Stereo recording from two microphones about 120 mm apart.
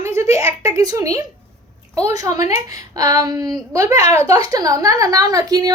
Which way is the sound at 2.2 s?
30° right (ahead or behind).